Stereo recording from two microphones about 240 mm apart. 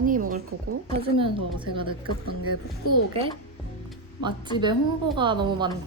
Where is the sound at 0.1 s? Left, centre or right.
Right.